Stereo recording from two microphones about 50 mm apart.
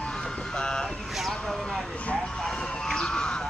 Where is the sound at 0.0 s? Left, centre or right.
Centre.